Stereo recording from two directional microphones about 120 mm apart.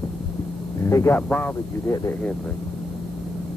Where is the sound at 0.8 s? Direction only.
25° left (ahead or behind).